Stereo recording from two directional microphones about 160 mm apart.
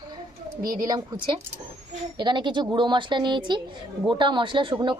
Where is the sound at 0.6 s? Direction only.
60° right (ahead or behind).